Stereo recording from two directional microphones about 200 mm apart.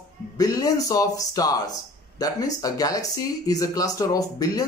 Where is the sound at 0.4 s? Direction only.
15° left (ahead or behind).